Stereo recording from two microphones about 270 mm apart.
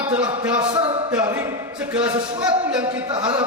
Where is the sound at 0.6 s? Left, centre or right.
Right.